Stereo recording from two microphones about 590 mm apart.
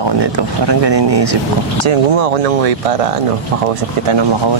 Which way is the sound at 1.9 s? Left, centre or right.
Right.